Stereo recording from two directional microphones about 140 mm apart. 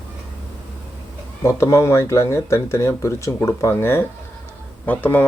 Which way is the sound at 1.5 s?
20° left (ahead or behind).